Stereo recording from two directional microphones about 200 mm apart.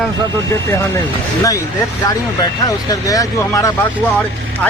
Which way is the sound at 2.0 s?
20° left (ahead or behind).